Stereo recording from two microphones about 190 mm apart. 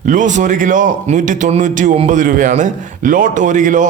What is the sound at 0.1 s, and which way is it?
A man's voice, 40° right (ahead or behind).